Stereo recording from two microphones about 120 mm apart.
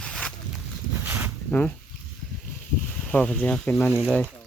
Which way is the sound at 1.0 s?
20° right (ahead or behind).